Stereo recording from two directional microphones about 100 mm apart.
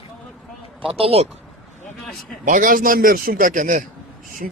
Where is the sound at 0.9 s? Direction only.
80° right.